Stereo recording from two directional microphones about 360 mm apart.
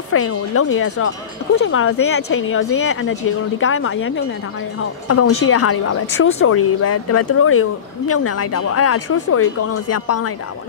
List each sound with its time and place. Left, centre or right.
0.1 s a woman's voice: left